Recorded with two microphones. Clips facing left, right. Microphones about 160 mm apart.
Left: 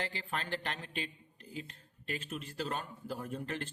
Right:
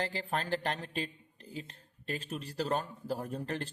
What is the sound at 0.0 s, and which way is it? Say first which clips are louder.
Speech: right 4 dB; 40° right (ahead or behind).